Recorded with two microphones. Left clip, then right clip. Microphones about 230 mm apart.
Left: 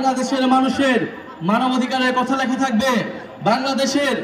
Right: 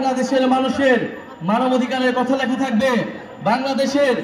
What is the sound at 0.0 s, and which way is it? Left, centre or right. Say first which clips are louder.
A man's voice: right 1 dB; left.